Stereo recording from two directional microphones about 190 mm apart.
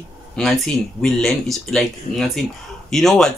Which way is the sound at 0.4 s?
Centre (ahead or behind).